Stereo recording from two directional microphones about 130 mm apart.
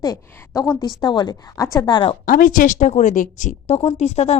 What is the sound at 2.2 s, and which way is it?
A woman's voice, 90° left.